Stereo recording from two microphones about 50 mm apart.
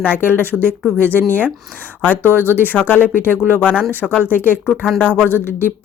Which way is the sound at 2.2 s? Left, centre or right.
Right.